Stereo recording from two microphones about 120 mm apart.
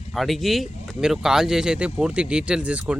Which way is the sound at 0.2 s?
Centre (ahead or behind).